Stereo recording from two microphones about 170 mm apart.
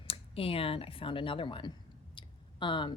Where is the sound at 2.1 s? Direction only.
30° left (ahead or behind).